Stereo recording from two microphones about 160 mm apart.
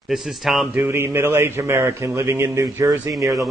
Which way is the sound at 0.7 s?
15° right (ahead or behind).